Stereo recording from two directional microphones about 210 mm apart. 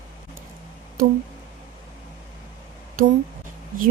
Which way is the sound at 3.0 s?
40° right (ahead or behind).